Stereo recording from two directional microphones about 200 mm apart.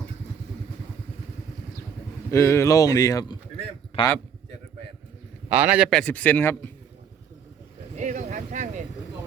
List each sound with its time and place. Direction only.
2.3 s a man's voice: 15° left (ahead or behind)
5.5 s a man's voice: 10° right (ahead or behind); by 6.7 s 10° left (ahead or behind)
7.9 s a sound: 40° right (ahead or behind)